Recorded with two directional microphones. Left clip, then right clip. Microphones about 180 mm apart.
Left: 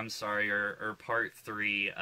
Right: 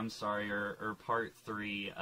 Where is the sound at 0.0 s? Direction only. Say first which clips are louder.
Left 5 dB; 35° left (ahead or behind).